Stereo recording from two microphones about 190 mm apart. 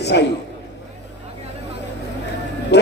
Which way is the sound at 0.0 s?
65° left (ahead or behind).